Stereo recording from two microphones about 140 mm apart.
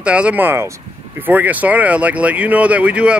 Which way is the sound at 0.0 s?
10° right (ahead or behind).